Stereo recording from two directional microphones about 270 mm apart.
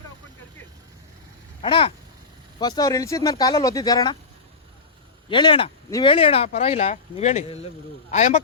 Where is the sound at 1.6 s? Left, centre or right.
Centre.